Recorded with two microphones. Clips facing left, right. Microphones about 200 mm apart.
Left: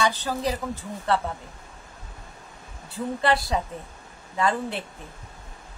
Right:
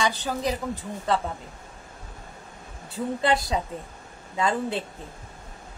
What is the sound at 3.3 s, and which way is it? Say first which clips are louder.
A woman's voice: left 1 dB; 20° right (ahead or behind).